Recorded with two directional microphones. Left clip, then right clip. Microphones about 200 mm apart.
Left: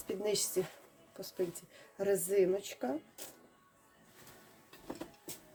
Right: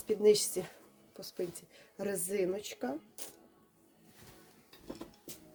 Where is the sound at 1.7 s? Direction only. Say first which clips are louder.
Left 7 dB; 20° right (ahead or behind).